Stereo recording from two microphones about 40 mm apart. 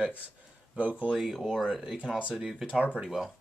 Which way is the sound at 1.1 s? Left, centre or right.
Centre.